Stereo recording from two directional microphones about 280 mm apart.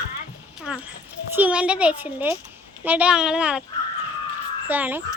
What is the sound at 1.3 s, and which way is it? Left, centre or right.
Speech, centre.